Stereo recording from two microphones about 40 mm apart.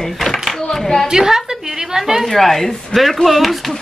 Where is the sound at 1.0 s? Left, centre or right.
Centre.